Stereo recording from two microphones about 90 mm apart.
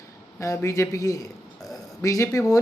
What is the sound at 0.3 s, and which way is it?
Speech, 35° left (ahead or behind).